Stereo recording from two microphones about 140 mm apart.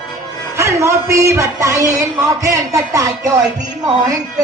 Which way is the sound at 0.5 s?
20° right (ahead or behind).